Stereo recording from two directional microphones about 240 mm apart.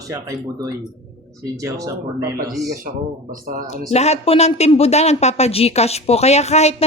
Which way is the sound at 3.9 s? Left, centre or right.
Left.